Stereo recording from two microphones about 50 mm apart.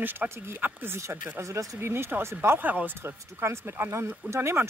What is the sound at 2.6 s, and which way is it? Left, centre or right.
Speech, right.